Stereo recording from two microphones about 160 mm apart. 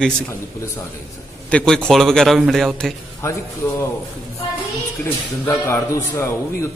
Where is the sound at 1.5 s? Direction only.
5° left (ahead or behind).